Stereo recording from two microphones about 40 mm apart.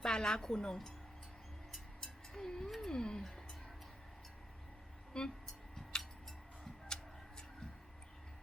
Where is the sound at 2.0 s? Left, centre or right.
Centre.